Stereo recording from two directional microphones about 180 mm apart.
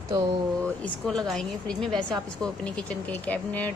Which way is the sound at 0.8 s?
5° left (ahead or behind).